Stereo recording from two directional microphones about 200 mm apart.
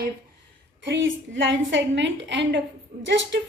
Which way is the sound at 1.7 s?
65° right (ahead or behind).